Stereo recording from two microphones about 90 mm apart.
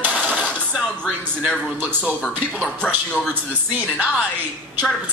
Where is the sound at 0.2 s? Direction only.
15° right (ahead or behind).